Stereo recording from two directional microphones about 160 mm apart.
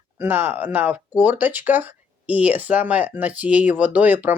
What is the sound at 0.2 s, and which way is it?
Speech, 10° right (ahead or behind).